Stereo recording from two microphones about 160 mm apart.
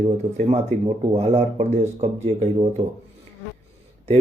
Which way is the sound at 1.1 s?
40° right (ahead or behind).